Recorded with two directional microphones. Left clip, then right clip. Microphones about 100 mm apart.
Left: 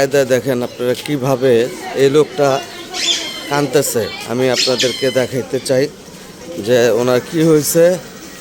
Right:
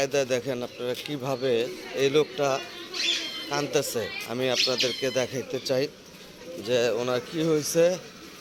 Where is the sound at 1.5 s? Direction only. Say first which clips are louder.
Left 12 dB; 45° left (ahead or behind).